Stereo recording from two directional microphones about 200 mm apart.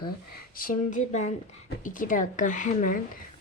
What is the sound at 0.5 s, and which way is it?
Speech, 45° left (ahead or behind).